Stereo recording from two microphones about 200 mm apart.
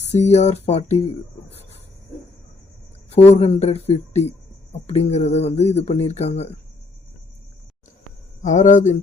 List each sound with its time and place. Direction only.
0.0 s speech: 35° left (ahead or behind)
3.1 s speech: 30° left (ahead or behind)
8.4 s speech: 35° left (ahead or behind)